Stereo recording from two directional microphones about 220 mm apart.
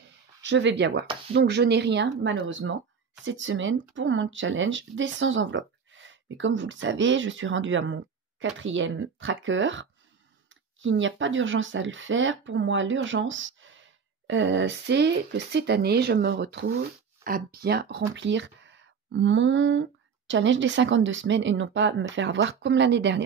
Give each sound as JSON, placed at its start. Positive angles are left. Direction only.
{"t": 0.4, "sound": "speech", "side_deg": -55}